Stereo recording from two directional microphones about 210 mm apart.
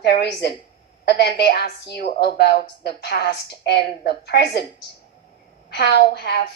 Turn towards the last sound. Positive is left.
turn(degrees=50)  # may be behind; listen again after turning